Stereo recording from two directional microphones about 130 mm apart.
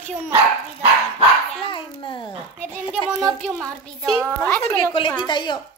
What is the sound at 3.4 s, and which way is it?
Speech, 5° left (ahead or behind).